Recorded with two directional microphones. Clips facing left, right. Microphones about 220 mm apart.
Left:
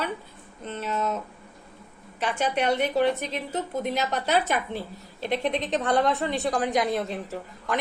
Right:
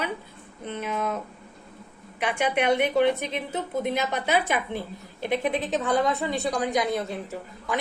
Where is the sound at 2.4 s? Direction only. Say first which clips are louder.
Right 1 dB; 10° right (ahead or behind).